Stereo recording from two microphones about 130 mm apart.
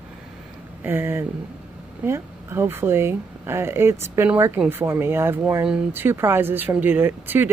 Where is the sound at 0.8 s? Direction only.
15° right (ahead or behind).